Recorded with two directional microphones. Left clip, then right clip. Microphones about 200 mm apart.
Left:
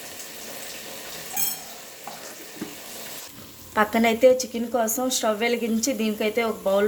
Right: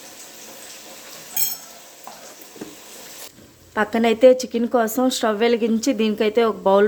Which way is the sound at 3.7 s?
25° right (ahead or behind).